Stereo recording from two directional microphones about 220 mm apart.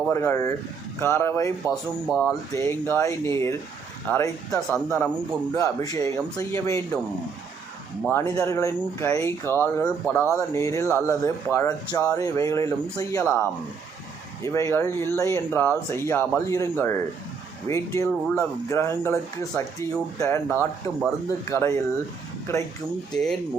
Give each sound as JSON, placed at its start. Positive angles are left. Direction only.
{"t": 0.1, "sound": "speech", "side_deg": 10}
{"t": 1.7, "sound": "speech", "side_deg": 0}
{"t": 2.6, "sound": "speech", "side_deg": 10}
{"t": 8.0, "sound": "speech", "side_deg": 10}
{"t": 14.4, "sound": "speech", "side_deg": 15}